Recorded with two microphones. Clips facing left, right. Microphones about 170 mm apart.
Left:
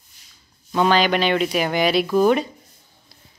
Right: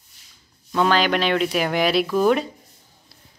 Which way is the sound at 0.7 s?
5° left (ahead or behind).